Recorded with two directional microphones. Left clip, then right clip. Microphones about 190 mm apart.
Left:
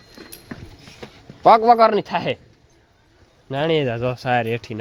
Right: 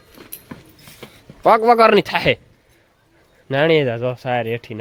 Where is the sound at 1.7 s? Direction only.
35° right (ahead or behind).